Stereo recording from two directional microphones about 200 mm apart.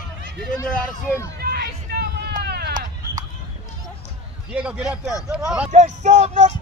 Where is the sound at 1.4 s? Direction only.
55° right (ahead or behind).